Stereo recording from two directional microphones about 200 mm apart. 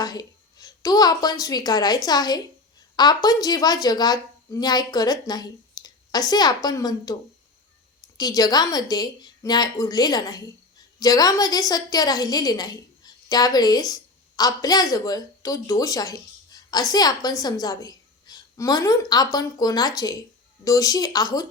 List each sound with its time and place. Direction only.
0.0 s a woman's voice: 20° left (ahead or behind)
8.2 s a woman's voice: 20° left (ahead or behind)